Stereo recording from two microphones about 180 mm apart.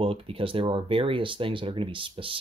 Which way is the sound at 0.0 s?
30° right (ahead or behind).